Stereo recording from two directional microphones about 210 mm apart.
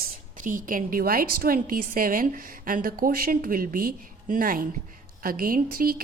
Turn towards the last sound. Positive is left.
turn(degrees=-40)  # may be behind; listen again after turning